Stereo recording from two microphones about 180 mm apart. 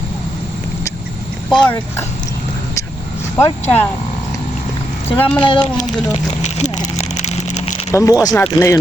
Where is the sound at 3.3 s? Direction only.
10° left (ahead or behind).